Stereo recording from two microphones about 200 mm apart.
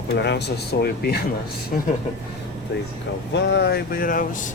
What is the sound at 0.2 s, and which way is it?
Speech, 55° left (ahead or behind).